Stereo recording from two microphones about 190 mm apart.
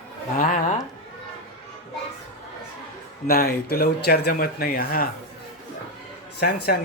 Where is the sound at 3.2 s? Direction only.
50° left (ahead or behind).